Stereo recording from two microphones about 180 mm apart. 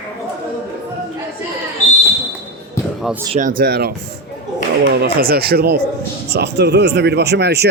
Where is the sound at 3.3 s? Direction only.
45° right (ahead or behind).